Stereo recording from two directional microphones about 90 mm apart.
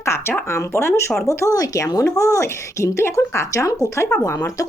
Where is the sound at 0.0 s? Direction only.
30° left (ahead or behind).